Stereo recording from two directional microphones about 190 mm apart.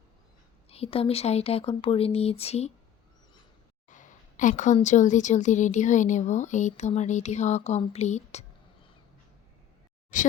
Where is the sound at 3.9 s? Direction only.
40° left (ahead or behind).